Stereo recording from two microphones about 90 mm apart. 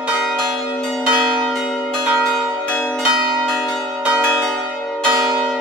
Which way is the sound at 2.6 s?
10° left (ahead or behind).